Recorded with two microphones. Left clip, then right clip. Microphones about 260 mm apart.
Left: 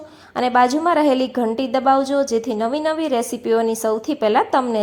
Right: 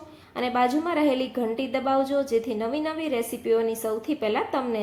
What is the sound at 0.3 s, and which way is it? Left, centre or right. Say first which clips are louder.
A woman's voice: left 8 dB; left.